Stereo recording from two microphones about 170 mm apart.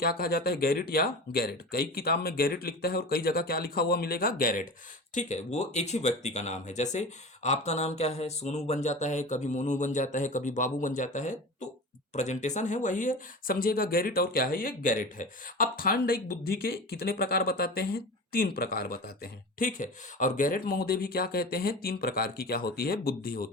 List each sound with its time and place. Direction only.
0.0 s speech: 60° left (ahead or behind)
5.1 s speech: 45° left (ahead or behind); by 23.5 s 60° left (ahead or behind)